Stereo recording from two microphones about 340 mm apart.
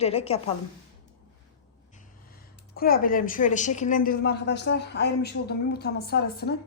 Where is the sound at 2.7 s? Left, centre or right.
Left.